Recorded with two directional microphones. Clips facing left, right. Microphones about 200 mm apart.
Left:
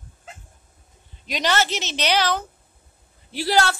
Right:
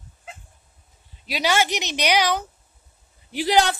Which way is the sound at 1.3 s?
10° right (ahead or behind).